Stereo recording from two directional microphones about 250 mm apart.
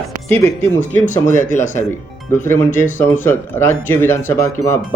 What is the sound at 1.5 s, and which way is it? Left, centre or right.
Speech, left.